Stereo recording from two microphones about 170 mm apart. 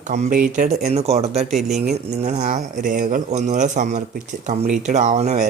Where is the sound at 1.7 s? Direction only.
40° right (ahead or behind).